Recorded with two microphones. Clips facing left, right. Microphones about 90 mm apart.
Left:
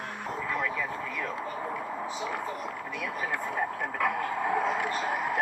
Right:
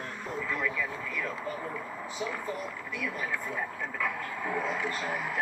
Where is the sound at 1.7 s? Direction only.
35° left (ahead or behind).